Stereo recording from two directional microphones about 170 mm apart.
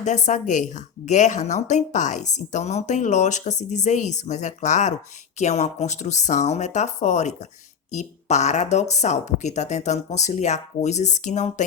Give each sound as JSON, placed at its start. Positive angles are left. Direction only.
{"t": 0.0, "sound": "a woman's voice", "side_deg": 45}